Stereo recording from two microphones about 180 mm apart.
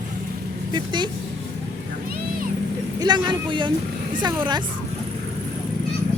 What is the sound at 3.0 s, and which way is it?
Speech, 25° right (ahead or behind).